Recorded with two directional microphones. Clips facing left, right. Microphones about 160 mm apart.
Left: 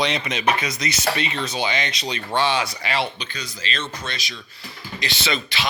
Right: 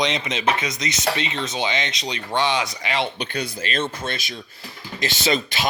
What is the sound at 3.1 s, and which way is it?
Speech, 60° right (ahead or behind).